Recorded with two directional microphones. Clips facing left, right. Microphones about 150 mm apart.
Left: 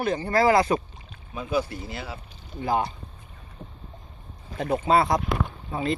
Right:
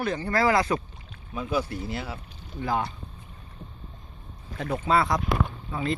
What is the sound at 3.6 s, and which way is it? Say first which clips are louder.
Boat: left 2 dB; 55° left (ahead or behind).